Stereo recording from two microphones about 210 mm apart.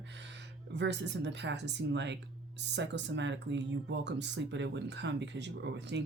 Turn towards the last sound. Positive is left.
turn(degrees=-55)  # may be behind; listen again after turning